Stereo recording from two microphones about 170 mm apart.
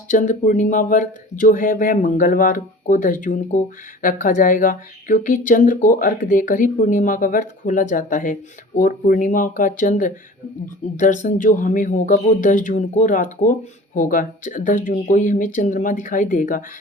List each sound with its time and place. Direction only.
0.1 s speech: 50° left (ahead or behind)